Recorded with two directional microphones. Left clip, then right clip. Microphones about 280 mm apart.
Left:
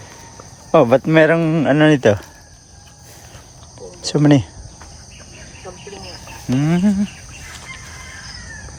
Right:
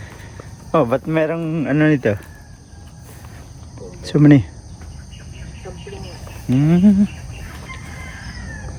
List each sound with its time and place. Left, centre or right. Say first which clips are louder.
0.7 s speech: left 5 dB; left; by 2.2 s centre
4.0 s speech: right 1 dB; centre
6.6 s speech: right 3 dB; centre